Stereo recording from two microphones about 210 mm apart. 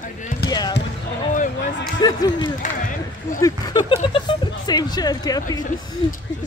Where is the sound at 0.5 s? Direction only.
20° left (ahead or behind).